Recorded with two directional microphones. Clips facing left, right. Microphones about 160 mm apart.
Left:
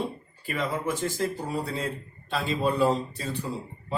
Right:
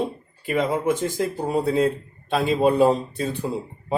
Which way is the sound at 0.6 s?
55° right (ahead or behind).